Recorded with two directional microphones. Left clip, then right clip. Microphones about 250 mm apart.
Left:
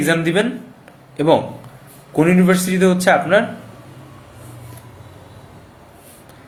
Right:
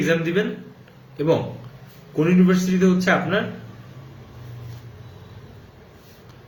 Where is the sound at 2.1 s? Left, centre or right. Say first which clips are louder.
Left 5 dB; centre.